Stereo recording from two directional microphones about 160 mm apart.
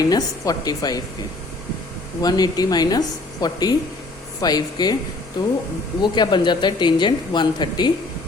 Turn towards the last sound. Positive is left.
turn(degrees=30)  # may be behind; listen again after turning